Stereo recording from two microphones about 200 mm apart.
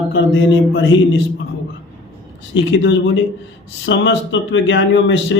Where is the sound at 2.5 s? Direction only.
65° left (ahead or behind).